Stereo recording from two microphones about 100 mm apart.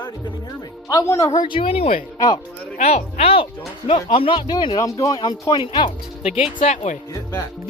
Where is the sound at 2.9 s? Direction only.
80° left; by 4.8 s 50° left (ahead or behind).